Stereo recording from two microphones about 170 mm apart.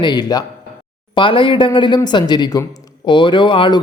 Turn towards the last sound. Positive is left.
turn(degrees=30)  # may be behind; listen again after turning